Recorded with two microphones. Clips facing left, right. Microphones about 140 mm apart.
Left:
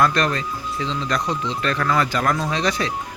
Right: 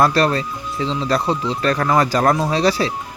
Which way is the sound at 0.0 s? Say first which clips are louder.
Right 4 dB; 35° right (ahead or behind).